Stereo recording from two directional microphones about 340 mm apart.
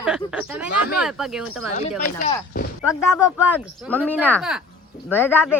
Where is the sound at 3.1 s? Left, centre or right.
Centre.